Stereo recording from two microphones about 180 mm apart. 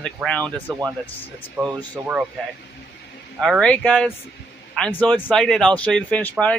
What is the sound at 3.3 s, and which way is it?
Speech, centre (ahead or behind).